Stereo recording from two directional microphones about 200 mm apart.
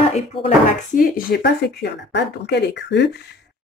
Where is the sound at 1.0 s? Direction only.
45° left (ahead or behind).